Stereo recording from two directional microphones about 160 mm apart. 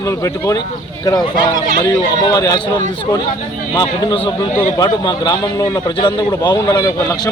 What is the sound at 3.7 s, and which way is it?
A man's voice, 25° left (ahead or behind).